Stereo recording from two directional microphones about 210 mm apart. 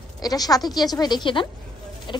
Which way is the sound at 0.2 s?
15° left (ahead or behind).